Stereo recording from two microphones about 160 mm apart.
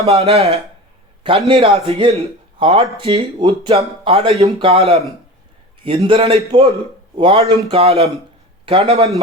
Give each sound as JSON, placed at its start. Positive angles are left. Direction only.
{"t": 0.0, "sound": "a man's voice", "side_deg": -40}